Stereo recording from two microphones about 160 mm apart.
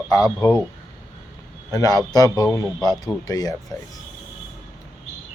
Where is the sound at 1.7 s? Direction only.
25° left (ahead or behind).